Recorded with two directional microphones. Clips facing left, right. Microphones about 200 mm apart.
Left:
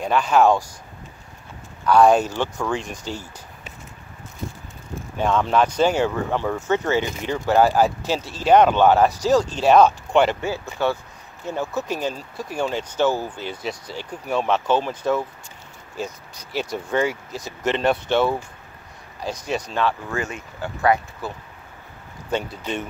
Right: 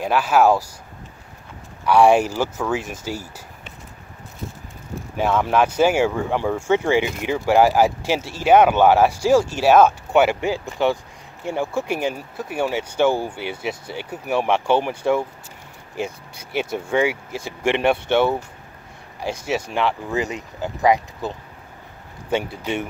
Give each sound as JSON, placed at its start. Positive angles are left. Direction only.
{"t": 0.0, "sound": "speech", "side_deg": -5}
{"t": 1.9, "sound": "speech", "side_deg": -10}
{"t": 5.1, "sound": "speech", "side_deg": -10}
{"t": 16.7, "sound": "speech", "side_deg": -10}
{"t": 19.1, "sound": "speech", "side_deg": -10}
{"t": 22.3, "sound": "speech", "side_deg": -10}